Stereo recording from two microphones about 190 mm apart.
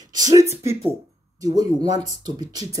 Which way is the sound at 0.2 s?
20° right (ahead or behind).